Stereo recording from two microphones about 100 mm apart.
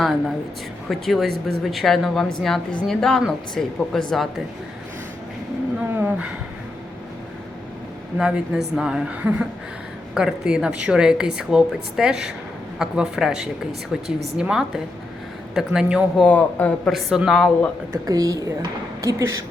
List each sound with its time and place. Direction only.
0.0 s a woman's voice: centre (ahead or behind)
5.9 s a sound: 20° right (ahead or behind)
8.2 s a woman's voice: 5° right (ahead or behind)
10.2 s a woman's voice: 5° right (ahead or behind)
16.2 s a man's voice: 15° left (ahead or behind)
16.9 s a woman's voice: centre (ahead or behind)
17.9 s a woman's voice: 35° right (ahead or behind)